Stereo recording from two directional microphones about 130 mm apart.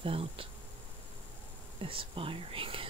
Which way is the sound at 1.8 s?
45° right (ahead or behind).